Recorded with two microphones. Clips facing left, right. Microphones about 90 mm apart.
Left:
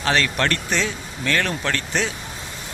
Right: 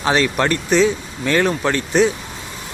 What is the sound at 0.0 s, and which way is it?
Speech, 15° right (ahead or behind).